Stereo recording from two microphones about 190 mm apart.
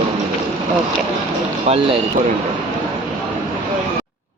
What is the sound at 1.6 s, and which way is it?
Speech, 30° right (ahead or behind).